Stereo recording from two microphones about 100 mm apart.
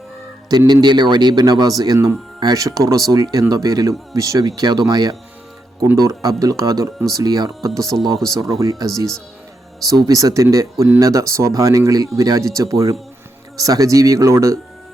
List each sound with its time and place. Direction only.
0.7 s speech: 45° right (ahead or behind); by 14.6 s 30° right (ahead or behind)